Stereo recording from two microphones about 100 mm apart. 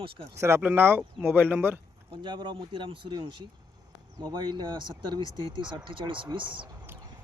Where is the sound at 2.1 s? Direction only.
50° right (ahead or behind).